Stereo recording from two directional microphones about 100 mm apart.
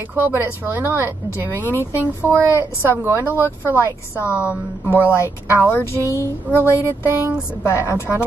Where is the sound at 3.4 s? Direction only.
25° left (ahead or behind).